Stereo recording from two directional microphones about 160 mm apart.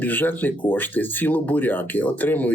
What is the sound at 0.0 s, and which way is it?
Speech, 10° left (ahead or behind).